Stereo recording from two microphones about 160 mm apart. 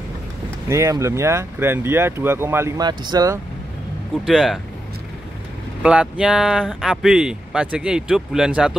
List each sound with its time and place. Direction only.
0.7 s speech: 15° right (ahead or behind)
2.9 s speech: 25° right (ahead or behind)
4.3 s speech: centre (ahead or behind)
5.8 s speech: 5° right (ahead or behind)